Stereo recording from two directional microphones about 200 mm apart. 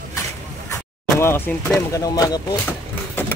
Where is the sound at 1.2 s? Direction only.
10° left (ahead or behind).